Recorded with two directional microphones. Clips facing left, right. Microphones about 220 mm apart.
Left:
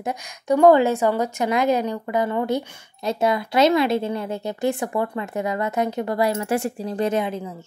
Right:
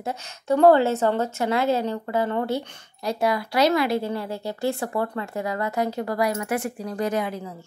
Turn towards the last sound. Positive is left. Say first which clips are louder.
# left 3 dB
turn(degrees=25)  # may be behind; listen again after turning